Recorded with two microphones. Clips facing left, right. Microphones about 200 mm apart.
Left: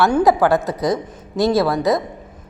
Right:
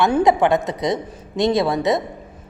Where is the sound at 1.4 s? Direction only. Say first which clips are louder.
Left 1 dB; 20° right (ahead or behind).